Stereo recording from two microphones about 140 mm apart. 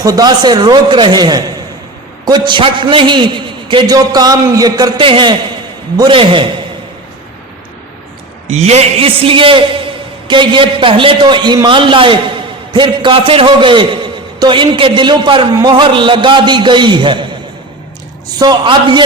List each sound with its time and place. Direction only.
0.0 s a man's voice: 25° right (ahead or behind)
4.9 s a man's voice: 40° right (ahead or behind)
8.4 s a man's voice: 50° right (ahead or behind); by 17.2 s 35° right (ahead or behind)
18.3 s a man's voice: 30° right (ahead or behind)